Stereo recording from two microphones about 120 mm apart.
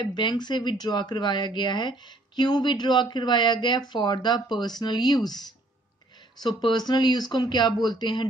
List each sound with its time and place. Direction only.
0.0 s speech: 40° left (ahead or behind)
6.4 s speech: 40° left (ahead or behind)